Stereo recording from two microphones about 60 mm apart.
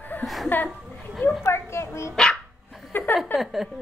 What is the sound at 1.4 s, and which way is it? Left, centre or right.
Speech, left.